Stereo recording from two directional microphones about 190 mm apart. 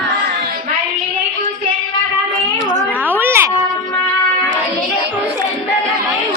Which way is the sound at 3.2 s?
15° right (ahead or behind).